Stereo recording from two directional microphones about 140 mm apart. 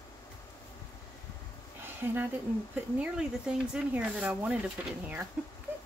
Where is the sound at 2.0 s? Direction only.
15° right (ahead or behind).